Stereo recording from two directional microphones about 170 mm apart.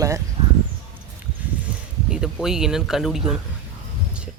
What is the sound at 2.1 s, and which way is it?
Speech, 5° right (ahead or behind).